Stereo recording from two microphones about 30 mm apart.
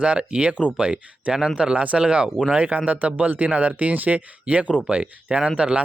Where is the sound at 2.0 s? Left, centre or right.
Right.